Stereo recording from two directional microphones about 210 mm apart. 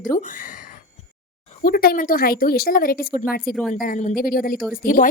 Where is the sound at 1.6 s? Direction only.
45° left (ahead or behind).